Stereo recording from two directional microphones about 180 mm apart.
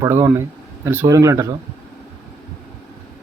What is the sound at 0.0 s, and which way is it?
Speech, 15° right (ahead or behind).